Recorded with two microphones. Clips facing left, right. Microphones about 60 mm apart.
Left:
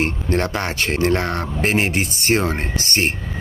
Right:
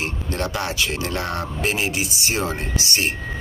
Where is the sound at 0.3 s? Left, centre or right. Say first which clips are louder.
Left 1 dB; left.